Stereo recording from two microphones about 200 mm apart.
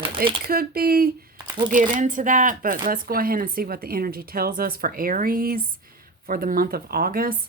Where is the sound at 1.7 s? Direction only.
40° right (ahead or behind).